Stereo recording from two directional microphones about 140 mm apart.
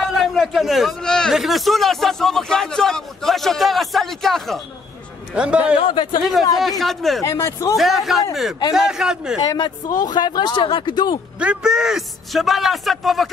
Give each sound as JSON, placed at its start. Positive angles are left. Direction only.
{"t": 0.0, "sound": "a man's voice", "side_deg": 0}
{"t": 7.2, "sound": "speech", "side_deg": 20}
{"t": 7.7, "sound": "a man's voice", "side_deg": 0}
{"t": 9.5, "sound": "speech", "side_deg": 25}
{"t": 11.3, "sound": "a man's voice", "side_deg": -5}